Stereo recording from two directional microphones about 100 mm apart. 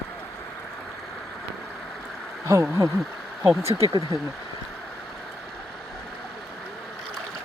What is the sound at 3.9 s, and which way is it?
Speech, 45° right (ahead or behind).